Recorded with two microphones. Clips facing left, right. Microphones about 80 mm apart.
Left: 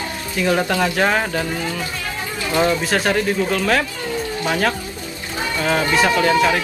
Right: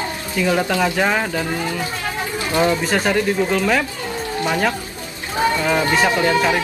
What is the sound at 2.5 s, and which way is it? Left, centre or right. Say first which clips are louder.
Speech: even; centre.